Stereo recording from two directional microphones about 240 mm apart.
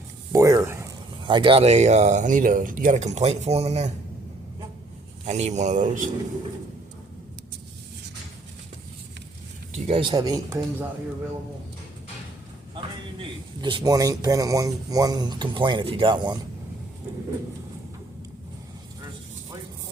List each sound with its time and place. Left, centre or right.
0.3 s a sound: centre
1.2 s speech: centre
5.2 s speech: right
9.8 s speech: right
12.7 s speech: right